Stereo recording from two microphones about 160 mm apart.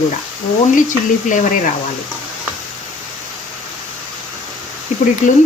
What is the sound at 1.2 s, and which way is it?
Speech, 55° left (ahead or behind).